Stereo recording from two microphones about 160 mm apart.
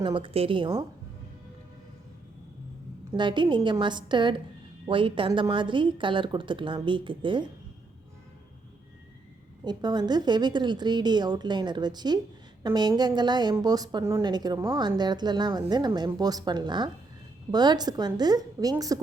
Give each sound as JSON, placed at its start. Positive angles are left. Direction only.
{"t": 0.0, "sound": "a woman's voice", "side_deg": -30}
{"t": 3.2, "sound": "a woman's voice", "side_deg": -30}
{"t": 9.6, "sound": "a woman's voice", "side_deg": -25}